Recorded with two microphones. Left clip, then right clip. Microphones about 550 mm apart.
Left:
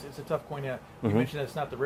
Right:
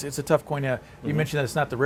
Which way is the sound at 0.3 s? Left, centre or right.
Right.